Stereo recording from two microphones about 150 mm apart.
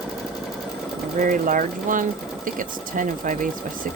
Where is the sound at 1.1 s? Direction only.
60° right (ahead or behind).